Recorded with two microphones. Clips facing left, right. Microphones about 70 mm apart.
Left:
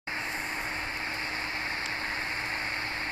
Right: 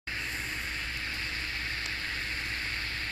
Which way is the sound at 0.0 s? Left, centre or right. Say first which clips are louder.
Left 3 dB; left.